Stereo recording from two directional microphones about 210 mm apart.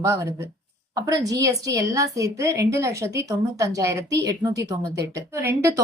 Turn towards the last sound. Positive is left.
turn(degrees=-10)  # may be behind; listen again after turning